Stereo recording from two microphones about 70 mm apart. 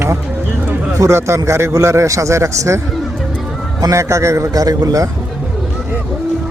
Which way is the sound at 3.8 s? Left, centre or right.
Right.